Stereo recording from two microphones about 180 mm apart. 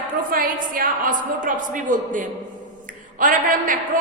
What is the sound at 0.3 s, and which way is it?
A woman's voice, 50° right (ahead or behind).